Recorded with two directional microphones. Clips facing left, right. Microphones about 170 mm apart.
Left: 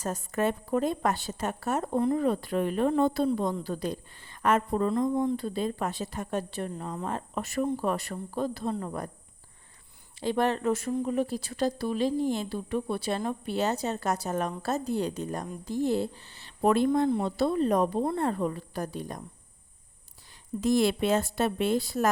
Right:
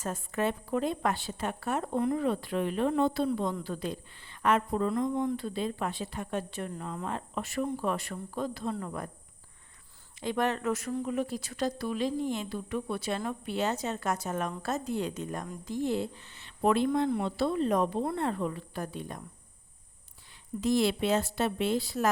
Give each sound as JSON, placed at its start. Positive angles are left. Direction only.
{"t": 0.0, "sound": "speech", "side_deg": 40}
{"t": 10.2, "sound": "speech", "side_deg": 35}
{"t": 20.6, "sound": "a woman's voice", "side_deg": 50}